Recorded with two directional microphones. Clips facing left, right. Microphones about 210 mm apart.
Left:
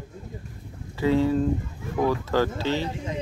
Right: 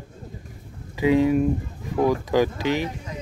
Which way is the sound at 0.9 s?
15° right (ahead or behind).